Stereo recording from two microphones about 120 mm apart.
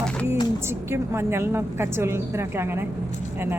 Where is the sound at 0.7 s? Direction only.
20° right (ahead or behind).